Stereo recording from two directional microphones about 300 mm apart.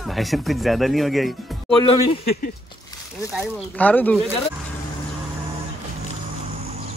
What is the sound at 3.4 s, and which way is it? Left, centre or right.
Speech, centre.